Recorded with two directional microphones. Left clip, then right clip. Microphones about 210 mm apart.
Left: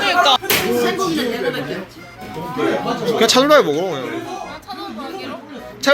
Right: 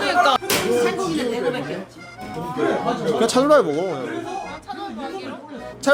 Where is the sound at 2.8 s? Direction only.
10° right (ahead or behind).